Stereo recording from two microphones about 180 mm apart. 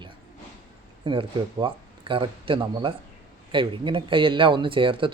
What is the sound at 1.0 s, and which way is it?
Speech, 30° right (ahead or behind).